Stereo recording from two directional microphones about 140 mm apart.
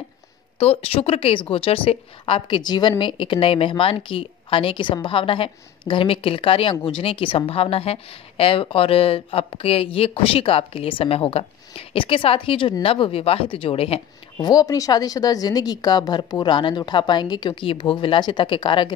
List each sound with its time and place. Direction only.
0.6 s a woman's voice: 45° left (ahead or behind)
14.4 s a woman's voice: 25° left (ahead or behind)